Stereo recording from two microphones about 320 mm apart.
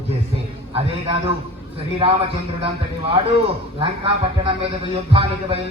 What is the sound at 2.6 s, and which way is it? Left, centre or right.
A man's voice, centre.